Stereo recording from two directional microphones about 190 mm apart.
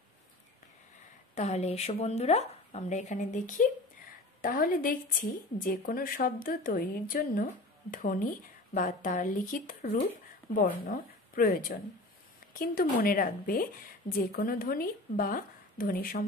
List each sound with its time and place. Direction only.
1.3 s a woman's voice: 35° left (ahead or behind)